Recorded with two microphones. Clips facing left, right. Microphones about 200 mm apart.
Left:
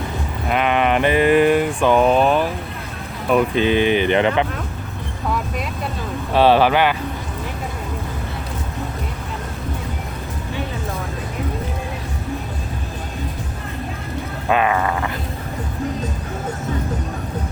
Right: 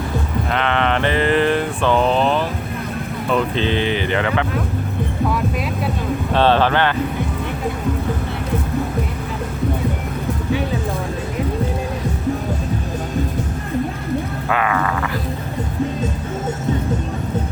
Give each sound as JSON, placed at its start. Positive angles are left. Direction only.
{"t": 0.5, "sound": "a sound", "side_deg": 15}
{"t": 3.2, "sound": "speech", "side_deg": 10}
{"t": 6.3, "sound": "speech", "side_deg": 10}
{"t": 14.5, "sound": "speech", "side_deg": 20}